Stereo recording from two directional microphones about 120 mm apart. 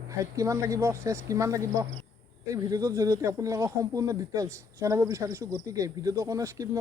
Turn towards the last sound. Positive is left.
turn(degrees=-25)  # may be behind; listen again after turning